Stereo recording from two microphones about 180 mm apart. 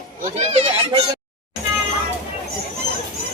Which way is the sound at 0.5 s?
35° right (ahead or behind).